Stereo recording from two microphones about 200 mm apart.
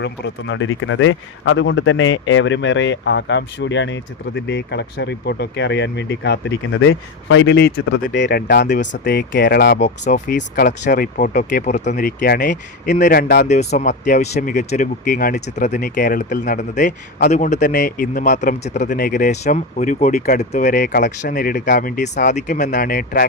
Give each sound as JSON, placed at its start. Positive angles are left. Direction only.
{"t": 0.0, "sound": "speech", "side_deg": 65}
{"t": 10.1, "sound": "speech", "side_deg": 40}
{"t": 13.5, "sound": "speech", "side_deg": 35}